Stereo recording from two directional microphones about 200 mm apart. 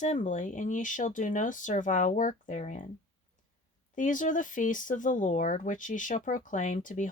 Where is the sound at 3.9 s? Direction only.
40° left (ahead or behind).